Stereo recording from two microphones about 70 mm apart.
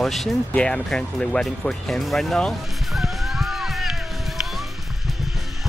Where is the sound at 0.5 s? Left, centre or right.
Centre.